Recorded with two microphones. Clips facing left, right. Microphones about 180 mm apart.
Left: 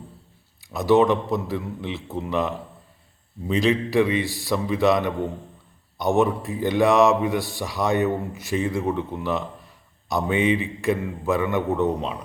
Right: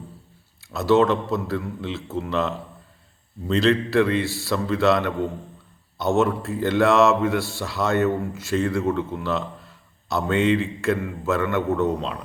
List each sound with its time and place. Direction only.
0.6 s speech: 15° left (ahead or behind)